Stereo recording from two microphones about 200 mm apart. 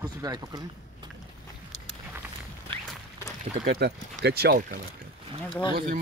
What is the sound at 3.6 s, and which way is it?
Speech, 40° right (ahead or behind).